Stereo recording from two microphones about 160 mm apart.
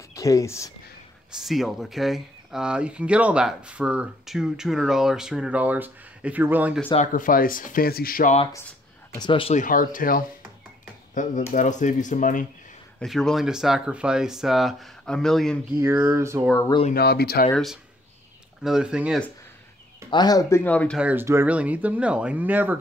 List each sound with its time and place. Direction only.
0.1 s speech: 20° left (ahead or behind)
1.3 s speech: centre (ahead or behind)
7.1 s speech: 55° left (ahead or behind)
9.1 s speech: 30° left (ahead or behind)
9.5 s speech: 55° left (ahead or behind)
13.0 s speech: centre (ahead or behind)
15.7 s speech: 15° right (ahead or behind)
16.9 s speech: 80° left
18.6 s speech: 5° right (ahead or behind)
20.1 s speech: 25° left (ahead or behind); by 21.0 s 10° left (ahead or behind)
21.0 s speech: 10° right (ahead or behind)